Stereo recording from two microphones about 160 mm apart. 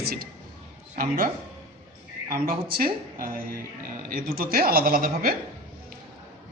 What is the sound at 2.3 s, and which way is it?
A man's voice, 65° right (ahead or behind).